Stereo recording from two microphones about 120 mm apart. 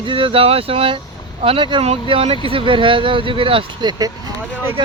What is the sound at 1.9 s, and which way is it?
Speech, 55° right (ahead or behind).